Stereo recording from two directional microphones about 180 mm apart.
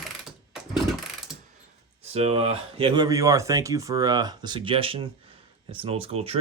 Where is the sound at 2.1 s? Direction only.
35° right (ahead or behind).